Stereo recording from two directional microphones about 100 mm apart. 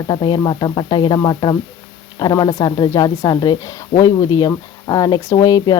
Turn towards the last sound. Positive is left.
turn(degrees=35)  # may be behind; listen again after turning